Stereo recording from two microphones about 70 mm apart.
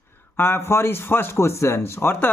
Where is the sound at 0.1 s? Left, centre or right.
Left.